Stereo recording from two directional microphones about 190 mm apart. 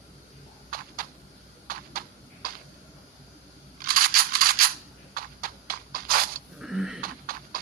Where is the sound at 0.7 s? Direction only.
50° right (ahead or behind).